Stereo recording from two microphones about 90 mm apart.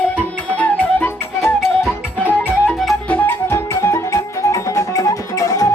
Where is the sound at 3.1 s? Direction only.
15° left (ahead or behind).